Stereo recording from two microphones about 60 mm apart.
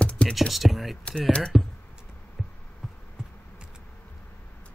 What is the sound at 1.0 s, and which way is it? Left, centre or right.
Speech, centre.